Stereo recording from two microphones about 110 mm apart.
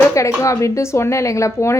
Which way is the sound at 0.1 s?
30° left (ahead or behind).